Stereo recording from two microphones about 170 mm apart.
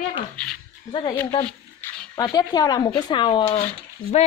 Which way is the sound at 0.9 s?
25° left (ahead or behind).